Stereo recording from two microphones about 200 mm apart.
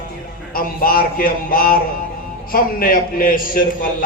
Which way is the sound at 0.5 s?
45° left (ahead or behind).